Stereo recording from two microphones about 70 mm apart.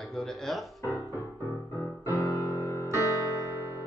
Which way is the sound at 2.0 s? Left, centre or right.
Left.